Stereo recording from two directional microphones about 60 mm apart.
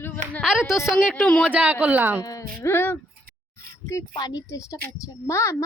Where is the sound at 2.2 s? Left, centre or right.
Left.